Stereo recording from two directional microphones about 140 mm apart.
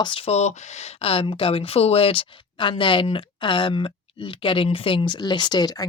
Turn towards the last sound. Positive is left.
turn(degrees=30)  # may be behind; listen again after turning